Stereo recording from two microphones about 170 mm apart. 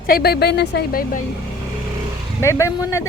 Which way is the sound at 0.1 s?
70° left (ahead or behind).